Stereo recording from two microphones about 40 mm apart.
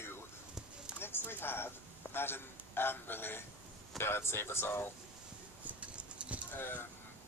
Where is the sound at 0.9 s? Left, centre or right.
Left.